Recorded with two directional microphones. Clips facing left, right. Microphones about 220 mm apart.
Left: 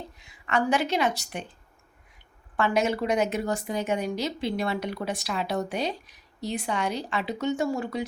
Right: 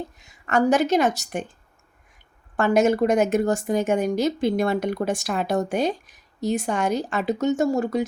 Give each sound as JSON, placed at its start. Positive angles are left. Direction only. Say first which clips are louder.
{"t": 0.2, "sound": "a woman's voice", "louder": "right 5 dB", "side_deg": -45}
{"t": 2.6, "sound": "speech", "louder": "right 6 dB", "side_deg": -45}